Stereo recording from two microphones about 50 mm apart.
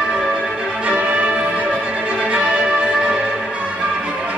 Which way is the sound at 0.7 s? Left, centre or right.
Right.